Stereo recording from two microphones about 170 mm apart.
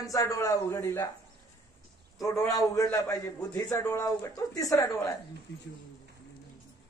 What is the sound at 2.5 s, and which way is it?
A man's voice, 20° left (ahead or behind).